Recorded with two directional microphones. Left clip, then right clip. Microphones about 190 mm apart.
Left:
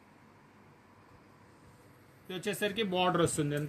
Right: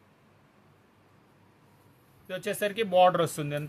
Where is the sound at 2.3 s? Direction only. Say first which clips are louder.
Right 4 dB; 50° right (ahead or behind).